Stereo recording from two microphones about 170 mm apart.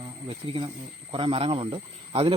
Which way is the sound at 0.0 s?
30° right (ahead or behind).